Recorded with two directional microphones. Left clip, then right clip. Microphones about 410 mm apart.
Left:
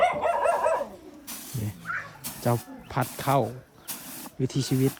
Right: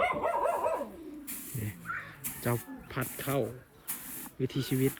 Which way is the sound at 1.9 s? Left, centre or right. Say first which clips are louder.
Left 6 dB; left.